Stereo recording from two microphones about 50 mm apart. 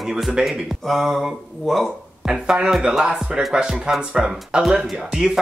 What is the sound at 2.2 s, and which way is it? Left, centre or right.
Speech, centre.